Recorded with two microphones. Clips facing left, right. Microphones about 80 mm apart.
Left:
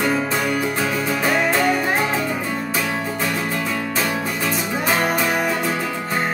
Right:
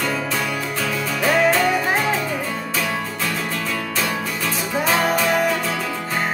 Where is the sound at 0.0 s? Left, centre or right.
Left.